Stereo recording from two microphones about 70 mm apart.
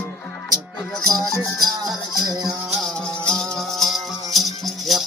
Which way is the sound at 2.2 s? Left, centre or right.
Right.